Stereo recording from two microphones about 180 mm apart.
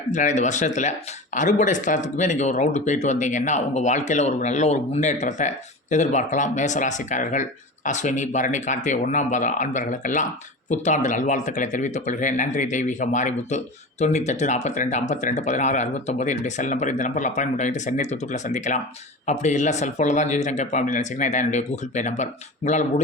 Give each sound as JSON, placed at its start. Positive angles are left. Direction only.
{"t": 0.1, "sound": "speech", "side_deg": 40}